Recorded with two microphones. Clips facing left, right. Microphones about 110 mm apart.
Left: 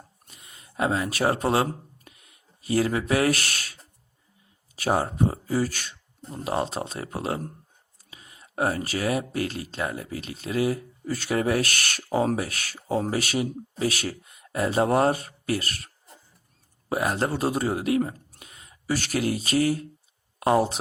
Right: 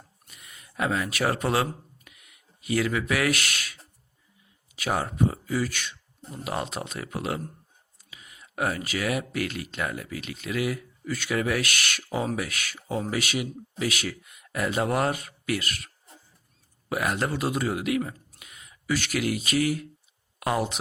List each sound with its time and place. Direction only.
0.3 s a sound: 30° left (ahead or behind)
4.7 s speech: 35° left (ahead or behind)
16.9 s speech: 30° left (ahead or behind)